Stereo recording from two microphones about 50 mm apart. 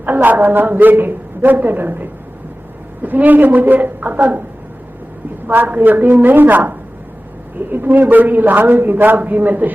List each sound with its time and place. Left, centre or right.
0.0 s a man's voice: right
5.5 s a man's voice: right